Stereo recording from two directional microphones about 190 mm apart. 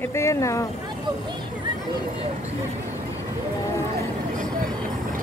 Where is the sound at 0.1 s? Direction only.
15° left (ahead or behind).